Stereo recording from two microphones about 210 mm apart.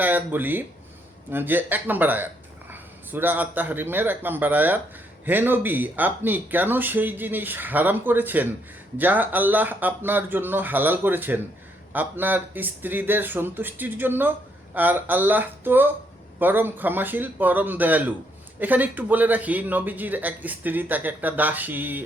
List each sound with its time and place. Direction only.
0.0 s speech: 10° right (ahead or behind)